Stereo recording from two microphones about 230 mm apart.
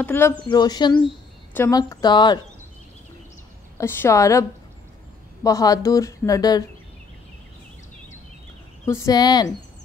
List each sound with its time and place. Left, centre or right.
0.0 s speech: centre
3.7 s speech: centre
8.8 s speech: centre